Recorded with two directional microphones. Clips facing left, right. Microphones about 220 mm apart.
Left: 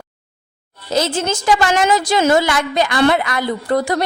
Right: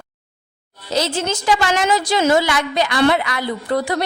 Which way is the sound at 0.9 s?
50° left (ahead or behind).